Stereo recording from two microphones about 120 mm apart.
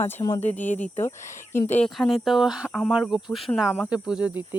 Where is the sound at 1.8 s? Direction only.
Centre (ahead or behind).